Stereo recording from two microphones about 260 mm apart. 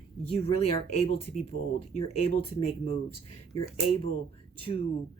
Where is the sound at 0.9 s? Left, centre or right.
Left.